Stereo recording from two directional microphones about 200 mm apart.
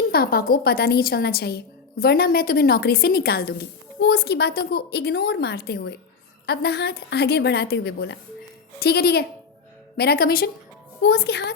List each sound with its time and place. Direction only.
0.1 s a woman's voice: 50° left (ahead or behind)